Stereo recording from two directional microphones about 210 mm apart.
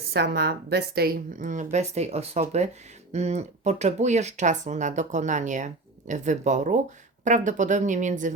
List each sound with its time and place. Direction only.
0.1 s speech: 50° right (ahead or behind)